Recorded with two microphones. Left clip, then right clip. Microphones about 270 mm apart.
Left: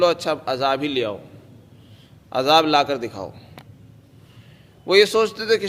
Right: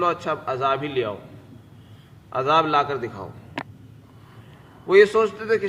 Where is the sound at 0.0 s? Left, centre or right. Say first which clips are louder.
Left 4 dB; left.